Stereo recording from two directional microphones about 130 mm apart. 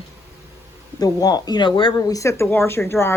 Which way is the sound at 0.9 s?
30° left (ahead or behind).